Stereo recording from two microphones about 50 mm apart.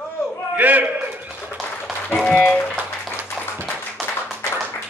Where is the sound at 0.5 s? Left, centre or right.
Right.